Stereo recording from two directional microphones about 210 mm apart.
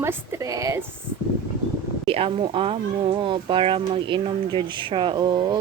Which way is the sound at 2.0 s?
25° right (ahead or behind).